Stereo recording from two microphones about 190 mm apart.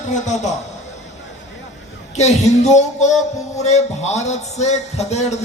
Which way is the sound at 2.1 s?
35° left (ahead or behind).